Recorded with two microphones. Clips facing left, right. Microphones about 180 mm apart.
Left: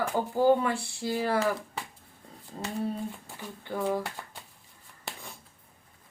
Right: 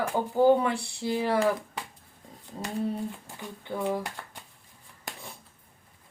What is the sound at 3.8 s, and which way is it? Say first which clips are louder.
Speech: left 1 dB; 5° left (ahead or behind).